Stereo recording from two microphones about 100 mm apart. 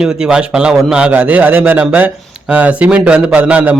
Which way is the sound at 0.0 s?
10° right (ahead or behind).